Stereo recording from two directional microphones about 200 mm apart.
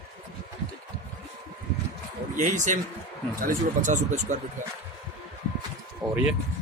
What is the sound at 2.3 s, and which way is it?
Speech, 40° right (ahead or behind).